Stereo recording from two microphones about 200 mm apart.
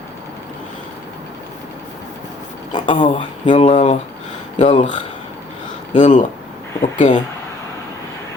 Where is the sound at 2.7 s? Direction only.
25° left (ahead or behind).